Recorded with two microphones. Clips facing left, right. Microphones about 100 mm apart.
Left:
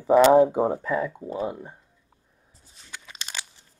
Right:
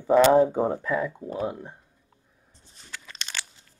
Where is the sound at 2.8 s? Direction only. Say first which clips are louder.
Right 1 dB; centre (ahead or behind).